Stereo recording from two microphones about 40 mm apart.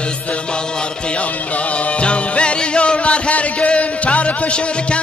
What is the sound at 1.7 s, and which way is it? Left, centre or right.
Music, left.